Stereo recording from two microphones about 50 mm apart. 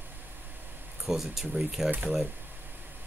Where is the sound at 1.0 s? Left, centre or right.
Centre.